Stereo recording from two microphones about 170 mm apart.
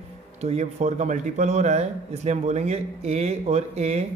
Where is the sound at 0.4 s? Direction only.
40° right (ahead or behind).